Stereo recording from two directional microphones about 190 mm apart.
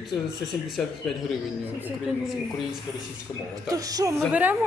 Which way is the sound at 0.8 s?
5° left (ahead or behind).